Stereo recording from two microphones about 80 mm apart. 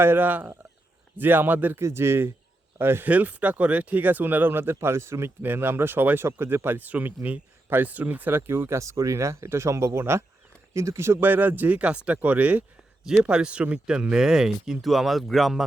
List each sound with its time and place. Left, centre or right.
0.0 s speech: right
1.8 s speech: right
3.1 s speech: centre